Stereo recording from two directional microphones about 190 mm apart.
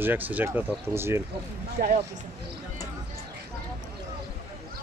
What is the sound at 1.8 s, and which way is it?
Speech, 50° right (ahead or behind).